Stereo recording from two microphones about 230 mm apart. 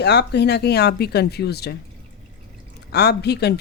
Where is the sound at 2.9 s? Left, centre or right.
Left.